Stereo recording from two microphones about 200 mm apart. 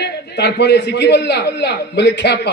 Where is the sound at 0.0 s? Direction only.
55° left (ahead or behind).